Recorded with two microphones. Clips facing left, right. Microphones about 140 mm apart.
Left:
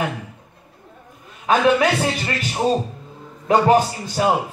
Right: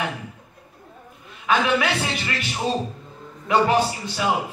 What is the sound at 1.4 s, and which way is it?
A man's voice, 40° left (ahead or behind).